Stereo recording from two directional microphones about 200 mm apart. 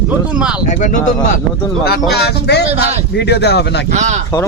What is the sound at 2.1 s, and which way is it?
Speech, 55° left (ahead or behind).